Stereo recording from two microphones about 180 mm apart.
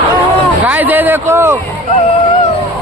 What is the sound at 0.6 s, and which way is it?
Speech, 10° right (ahead or behind).